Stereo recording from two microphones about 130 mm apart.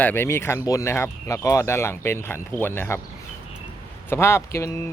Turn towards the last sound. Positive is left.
turn(degrees=20)  # may be behind; listen again after turning